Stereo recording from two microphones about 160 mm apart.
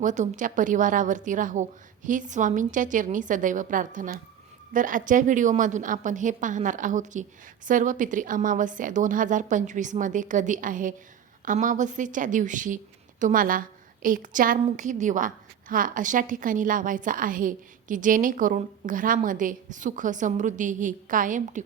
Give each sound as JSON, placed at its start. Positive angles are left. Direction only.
{"t": 0.0, "sound": "a woman's voice", "side_deg": -50}